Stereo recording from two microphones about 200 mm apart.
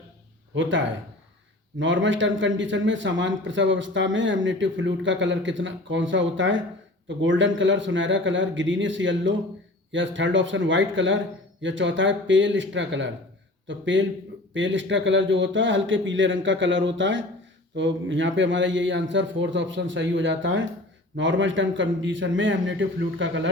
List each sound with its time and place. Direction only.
0.5 s a man's voice: 70° right (ahead or behind)
1.8 s a man's voice: 70° right (ahead or behind)